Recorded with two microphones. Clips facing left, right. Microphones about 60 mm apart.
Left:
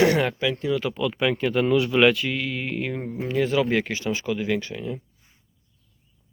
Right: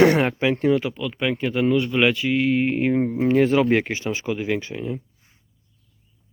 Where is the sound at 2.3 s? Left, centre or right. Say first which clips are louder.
Right 8 dB; right.